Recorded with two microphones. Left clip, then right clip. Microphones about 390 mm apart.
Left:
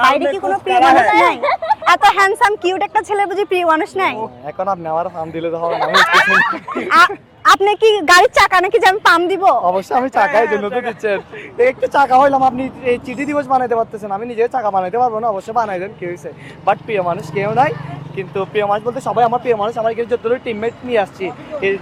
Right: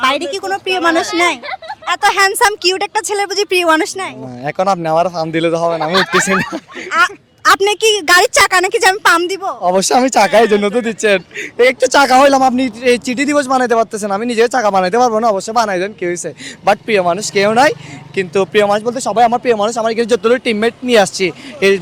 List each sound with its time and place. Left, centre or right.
0.0 s a woman's voice: centre
1.4 s a sound: right
2.0 s a woman's voice: centre
4.4 s speech: right
5.8 s speech: right
6.8 s a woman's voice: centre
9.6 s speech: right